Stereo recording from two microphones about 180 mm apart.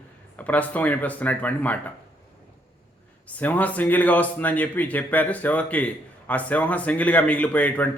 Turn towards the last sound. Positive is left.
turn(degrees=10)  # may be behind; listen again after turning